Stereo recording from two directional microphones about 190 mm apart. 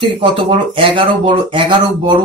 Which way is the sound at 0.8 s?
30° right (ahead or behind).